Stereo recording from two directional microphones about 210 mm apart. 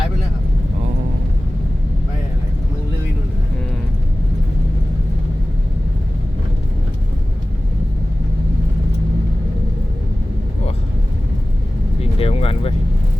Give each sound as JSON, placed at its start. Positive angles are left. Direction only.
{"t": 12.2, "sound": "vehicle", "side_deg": 25}